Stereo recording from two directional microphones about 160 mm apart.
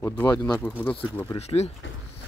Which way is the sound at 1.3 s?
40° left (ahead or behind).